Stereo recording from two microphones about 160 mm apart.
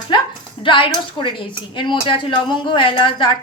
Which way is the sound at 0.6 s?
30° left (ahead or behind).